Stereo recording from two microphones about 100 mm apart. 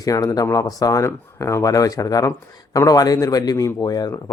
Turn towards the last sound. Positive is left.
turn(degrees=40)  # may be behind; listen again after turning